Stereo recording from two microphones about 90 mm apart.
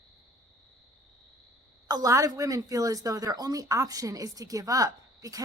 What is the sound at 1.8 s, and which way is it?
A woman's voice, 45° right (ahead or behind).